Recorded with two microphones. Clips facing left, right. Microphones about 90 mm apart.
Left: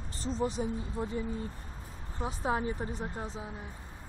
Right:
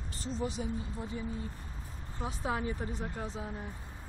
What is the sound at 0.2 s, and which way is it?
Speech, 35° left (ahead or behind).